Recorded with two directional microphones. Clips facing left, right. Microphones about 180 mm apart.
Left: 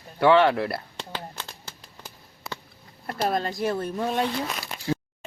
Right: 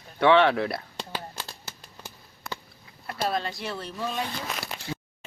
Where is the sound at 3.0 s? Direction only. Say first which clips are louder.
Left 3 dB; 45° left (ahead or behind).